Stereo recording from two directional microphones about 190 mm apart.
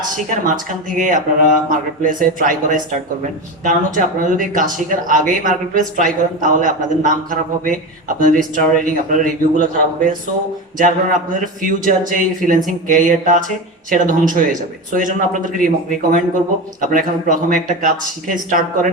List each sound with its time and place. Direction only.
0.0 s a man's voice: 45° right (ahead or behind)